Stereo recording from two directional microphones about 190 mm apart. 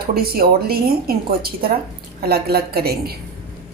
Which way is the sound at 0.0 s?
50° right (ahead or behind).